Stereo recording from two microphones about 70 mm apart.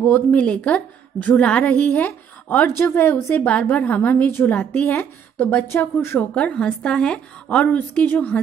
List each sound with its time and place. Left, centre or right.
0.1 s a woman's voice: left
6.3 s a woman's voice: centre
7.6 s a woman's voice: left